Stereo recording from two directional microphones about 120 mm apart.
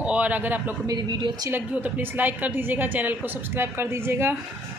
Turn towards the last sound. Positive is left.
turn(degrees=-20)  # may be behind; listen again after turning